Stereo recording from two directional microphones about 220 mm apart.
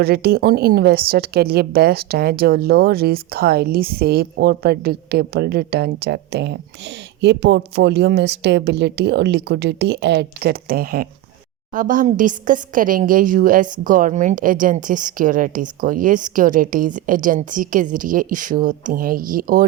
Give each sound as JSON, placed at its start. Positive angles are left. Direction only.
{"t": 0.0, "sound": "a woman's voice", "side_deg": -45}